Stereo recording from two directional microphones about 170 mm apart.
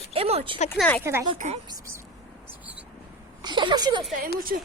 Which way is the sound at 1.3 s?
45° right (ahead or behind).